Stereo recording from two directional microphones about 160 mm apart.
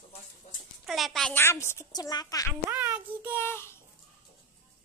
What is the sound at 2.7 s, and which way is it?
Child singing, 10° right (ahead or behind).